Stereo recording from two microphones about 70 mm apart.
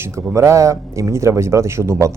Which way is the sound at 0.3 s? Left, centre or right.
Right.